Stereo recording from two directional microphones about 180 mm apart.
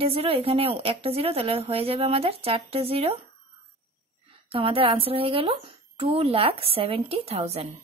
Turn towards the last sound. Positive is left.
turn(degrees=-35)  # may be behind; listen again after turning